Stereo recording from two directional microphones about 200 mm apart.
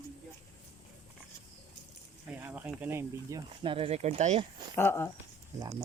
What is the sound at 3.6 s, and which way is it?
Speech, 25° right (ahead or behind).